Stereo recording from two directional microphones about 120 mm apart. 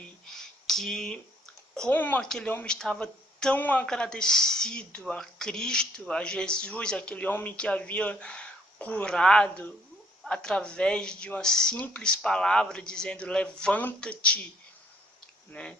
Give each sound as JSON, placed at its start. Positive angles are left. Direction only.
{"t": 0.3, "sound": "a sound", "side_deg": 5}
{"t": 1.9, "sound": "speech", "side_deg": 15}
{"t": 2.2, "sound": "speech", "side_deg": 5}
{"t": 2.5, "sound": "speech", "side_deg": 15}
{"t": 2.7, "sound": "speech", "side_deg": 5}
{"t": 15.5, "sound": "speech", "side_deg": 10}